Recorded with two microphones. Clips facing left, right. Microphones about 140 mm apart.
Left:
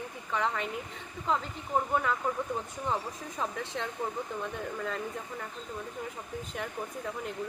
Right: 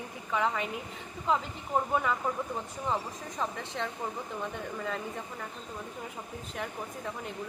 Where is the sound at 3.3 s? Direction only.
Centre (ahead or behind).